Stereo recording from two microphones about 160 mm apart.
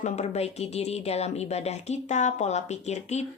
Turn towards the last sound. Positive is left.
turn(degrees=45)  # may be behind; listen again after turning